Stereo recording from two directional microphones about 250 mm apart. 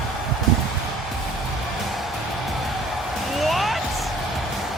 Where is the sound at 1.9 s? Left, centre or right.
Centre.